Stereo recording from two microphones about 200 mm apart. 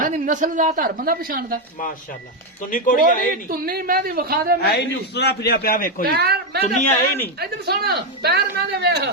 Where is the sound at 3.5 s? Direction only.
45° right (ahead or behind).